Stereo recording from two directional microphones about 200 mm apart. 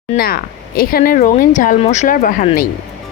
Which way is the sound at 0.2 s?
50° left (ahead or behind).